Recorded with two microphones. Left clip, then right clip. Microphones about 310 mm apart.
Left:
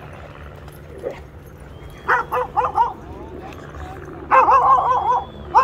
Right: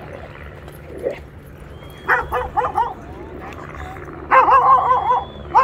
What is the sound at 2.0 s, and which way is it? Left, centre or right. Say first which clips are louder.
Dog: even; centre.